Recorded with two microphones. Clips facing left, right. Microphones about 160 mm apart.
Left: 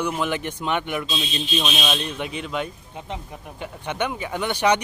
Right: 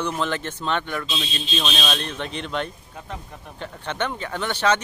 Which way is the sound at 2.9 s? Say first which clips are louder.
Left 3 dB; 20° left (ahead or behind).